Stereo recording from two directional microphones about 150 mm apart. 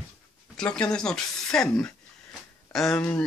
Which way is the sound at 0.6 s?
5° left (ahead or behind).